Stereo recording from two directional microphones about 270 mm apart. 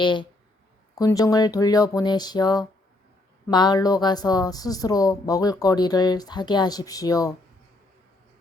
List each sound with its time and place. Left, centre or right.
0.0 s a woman's voice: centre